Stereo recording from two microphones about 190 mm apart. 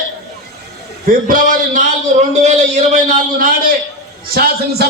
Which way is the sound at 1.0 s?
45° right (ahead or behind).